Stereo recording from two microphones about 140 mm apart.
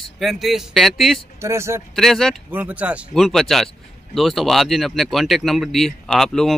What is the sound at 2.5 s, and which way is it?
Speech, 10° right (ahead or behind).